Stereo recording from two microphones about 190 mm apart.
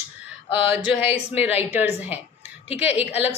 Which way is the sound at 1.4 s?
10° right (ahead or behind).